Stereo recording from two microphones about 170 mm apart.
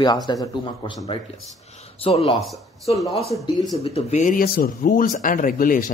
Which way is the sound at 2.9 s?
35° left (ahead or behind).